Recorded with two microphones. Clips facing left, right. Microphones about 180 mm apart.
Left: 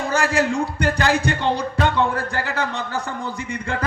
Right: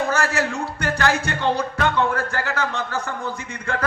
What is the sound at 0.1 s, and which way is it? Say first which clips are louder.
A man's voice: left 2 dB; 15° left (ahead or behind).